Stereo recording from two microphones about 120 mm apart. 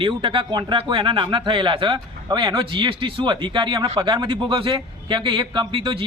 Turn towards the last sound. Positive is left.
turn(degrees=-50)  # may be behind; listen again after turning